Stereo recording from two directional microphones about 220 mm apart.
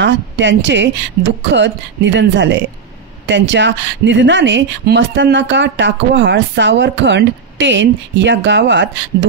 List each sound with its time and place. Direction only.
0.0 s speech: 55° right (ahead or behind)